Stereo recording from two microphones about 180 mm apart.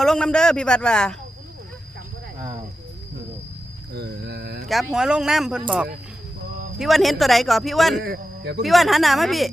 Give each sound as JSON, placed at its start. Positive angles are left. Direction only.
{"t": 0.0, "sound": "speech", "side_deg": 5}
{"t": 3.9, "sound": "a sound", "side_deg": -65}
{"t": 4.7, "sound": "speech", "side_deg": 0}
{"t": 8.0, "sound": "speech", "side_deg": -65}
{"t": 8.6, "sound": "speech", "side_deg": 0}